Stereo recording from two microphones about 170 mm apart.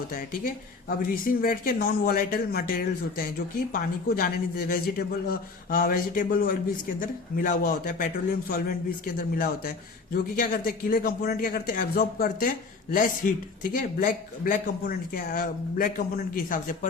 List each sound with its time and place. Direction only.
0.1 s speech: 55° left (ahead or behind)